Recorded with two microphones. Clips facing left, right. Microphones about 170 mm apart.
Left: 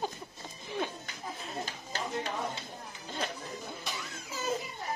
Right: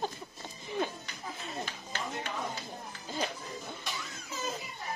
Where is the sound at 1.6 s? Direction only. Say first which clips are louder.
Left 1 dB; 40° left (ahead or behind).